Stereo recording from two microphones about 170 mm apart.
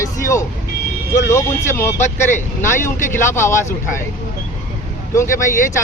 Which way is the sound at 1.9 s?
45° left (ahead or behind).